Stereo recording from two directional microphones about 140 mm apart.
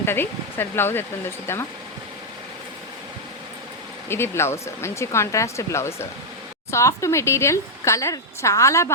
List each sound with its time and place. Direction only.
0.0 s speech: 15° left (ahead or behind)
4.1 s speech: 15° left (ahead or behind)